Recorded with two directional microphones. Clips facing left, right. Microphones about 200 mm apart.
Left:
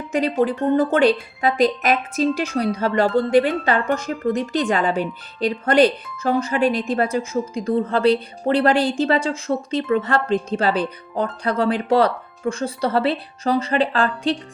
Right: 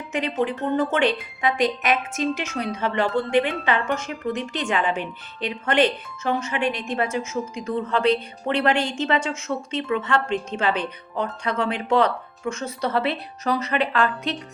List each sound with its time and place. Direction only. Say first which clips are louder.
0.1 s speech: left 5 dB; 40° left (ahead or behind)